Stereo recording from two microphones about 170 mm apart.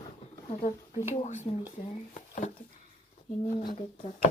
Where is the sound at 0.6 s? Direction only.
45° left (ahead or behind).